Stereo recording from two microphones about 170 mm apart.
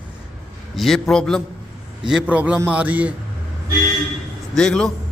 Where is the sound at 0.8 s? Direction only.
Centre (ahead or behind).